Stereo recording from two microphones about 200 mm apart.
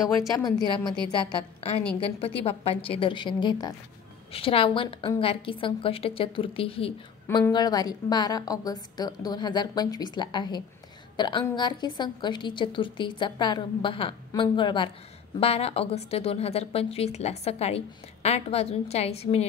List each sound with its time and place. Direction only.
0.4 s a woman's voice: 20° left (ahead or behind)
2.0 s a woman's voice: 30° left (ahead or behind)
7.2 s a woman's voice: 10° left (ahead or behind); by 19.4 s 30° left (ahead or behind)